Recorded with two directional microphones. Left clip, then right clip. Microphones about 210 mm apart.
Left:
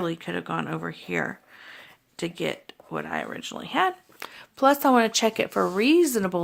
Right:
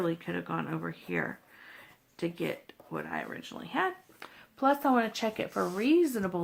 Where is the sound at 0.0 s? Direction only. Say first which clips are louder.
Left 3 dB; 45° left (ahead or behind).